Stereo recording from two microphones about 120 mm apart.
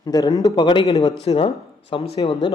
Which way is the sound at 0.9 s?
30° left (ahead or behind).